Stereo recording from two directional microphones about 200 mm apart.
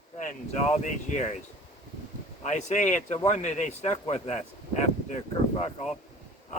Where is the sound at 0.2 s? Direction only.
40° left (ahead or behind).